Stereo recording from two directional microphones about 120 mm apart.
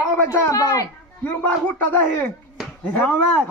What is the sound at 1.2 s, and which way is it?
A man's voice, 15° left (ahead or behind).